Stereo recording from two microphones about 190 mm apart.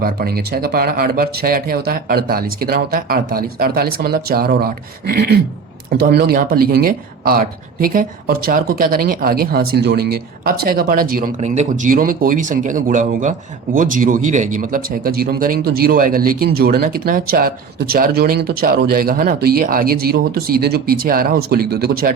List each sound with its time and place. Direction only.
0.0 s speech: 50° right (ahead or behind)
11.3 s speech: 35° right (ahead or behind); by 22.1 s 55° right (ahead or behind)